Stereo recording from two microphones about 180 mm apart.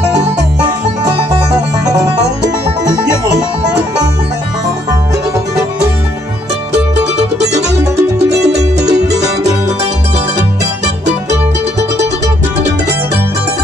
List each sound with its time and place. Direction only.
8.2 s music: 70° right (ahead or behind)